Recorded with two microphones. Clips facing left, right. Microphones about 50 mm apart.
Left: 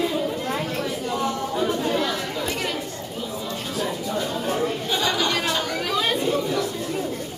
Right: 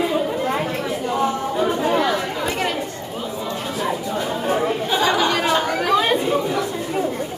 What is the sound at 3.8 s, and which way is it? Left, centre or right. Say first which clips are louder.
Chatter: right 3 dB; right.